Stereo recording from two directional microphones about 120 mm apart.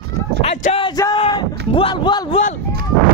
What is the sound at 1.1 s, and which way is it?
Speech, 45° left (ahead or behind).